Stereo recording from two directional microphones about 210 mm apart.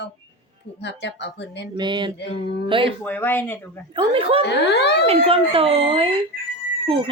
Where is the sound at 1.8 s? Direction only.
20° right (ahead or behind).